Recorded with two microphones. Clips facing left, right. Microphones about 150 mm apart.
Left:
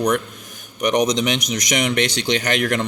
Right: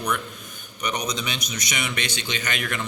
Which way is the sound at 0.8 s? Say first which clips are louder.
Left 10 dB; 85° left.